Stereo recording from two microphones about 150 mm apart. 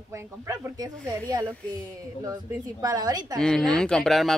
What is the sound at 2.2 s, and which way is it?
A woman's voice, 25° right (ahead or behind).